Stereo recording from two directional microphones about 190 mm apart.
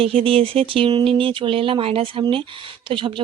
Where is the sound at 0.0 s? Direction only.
30° right (ahead or behind).